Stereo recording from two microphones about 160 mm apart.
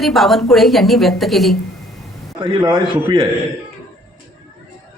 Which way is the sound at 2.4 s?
30° right (ahead or behind).